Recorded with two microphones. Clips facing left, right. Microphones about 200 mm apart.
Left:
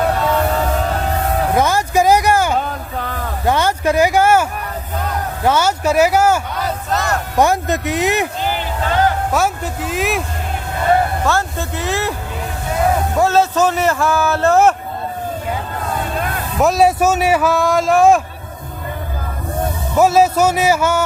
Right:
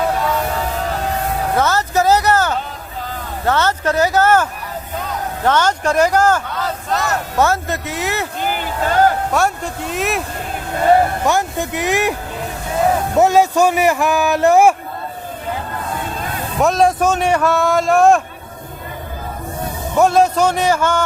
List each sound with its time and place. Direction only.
1.5 s a sound: 15° left (ahead or behind)
2.6 s a sound: 60° left (ahead or behind)
3.4 s speech: 15° left (ahead or behind)
5.5 s speech: 10° left (ahead or behind)
9.3 s a man's voice: centre (ahead or behind)
11.3 s a man's voice: 15° right (ahead or behind)
13.1 s a man's voice: 15° right (ahead or behind)
16.6 s a man's voice: 5° left (ahead or behind)
20.0 s speech: 5° left (ahead or behind)